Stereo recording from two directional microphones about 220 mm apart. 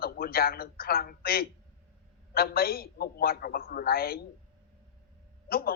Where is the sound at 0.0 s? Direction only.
45° left (ahead or behind).